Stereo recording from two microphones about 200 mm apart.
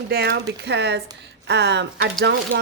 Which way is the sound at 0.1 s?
50° right (ahead or behind).